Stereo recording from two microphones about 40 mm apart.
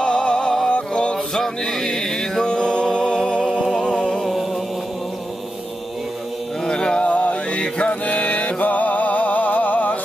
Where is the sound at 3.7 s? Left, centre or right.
Centre.